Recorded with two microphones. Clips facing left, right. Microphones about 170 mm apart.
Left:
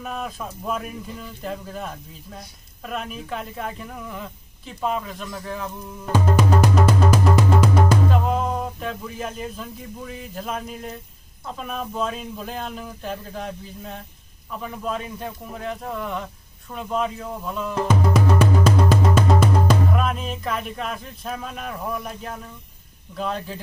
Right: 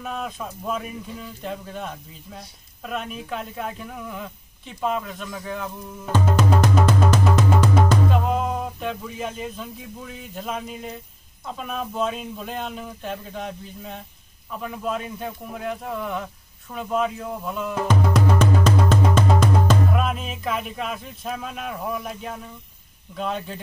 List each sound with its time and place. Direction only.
0.0 s speech: centre (ahead or behind)
6.3 s music: 5° left (ahead or behind)
8.1 s a sound: centre (ahead or behind)
11.4 s speech: centre (ahead or behind)
17.8 s music: 5° left (ahead or behind)
19.9 s speech: centre (ahead or behind)